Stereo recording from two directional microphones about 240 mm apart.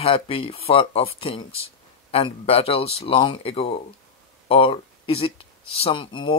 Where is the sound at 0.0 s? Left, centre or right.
Left.